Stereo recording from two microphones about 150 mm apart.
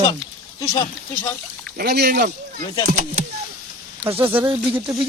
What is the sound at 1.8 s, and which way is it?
Speech, 90° right.